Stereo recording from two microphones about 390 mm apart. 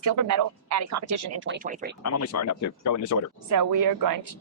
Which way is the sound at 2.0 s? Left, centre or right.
Left.